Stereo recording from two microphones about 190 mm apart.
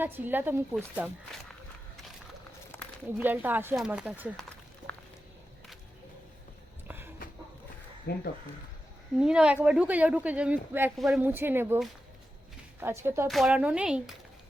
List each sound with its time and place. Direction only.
0.0 s speech: 10° right (ahead or behind)
3.2 s speech: 10° right (ahead or behind)
4.4 s run: 5° left (ahead or behind)
6.8 s a sound: 10° right (ahead or behind)
8.1 s speech: 55° left (ahead or behind)
9.1 s speech: 5° right (ahead or behind)
12.8 s speech: 10° right (ahead or behind)
13.2 s speech: centre (ahead or behind)